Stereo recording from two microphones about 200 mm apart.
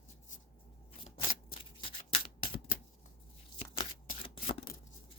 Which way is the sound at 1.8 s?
25° left (ahead or behind).